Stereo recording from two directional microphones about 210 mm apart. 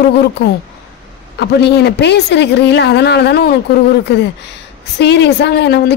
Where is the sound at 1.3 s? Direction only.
55° left (ahead or behind).